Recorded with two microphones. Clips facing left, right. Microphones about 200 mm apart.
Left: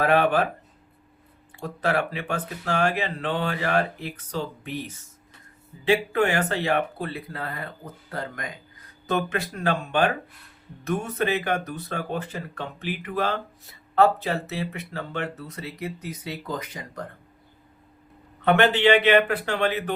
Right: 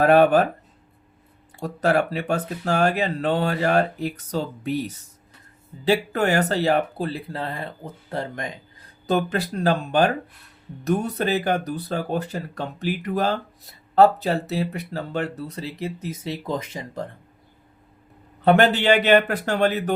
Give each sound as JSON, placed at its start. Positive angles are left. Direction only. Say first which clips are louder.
{"t": 0.0, "sound": "speech", "louder": "right 5 dB", "side_deg": -40}
{"t": 1.5, "sound": "speech", "louder": "right 4 dB", "side_deg": -40}
{"t": 18.4, "sound": "speech", "louder": "right 2 dB", "side_deg": -40}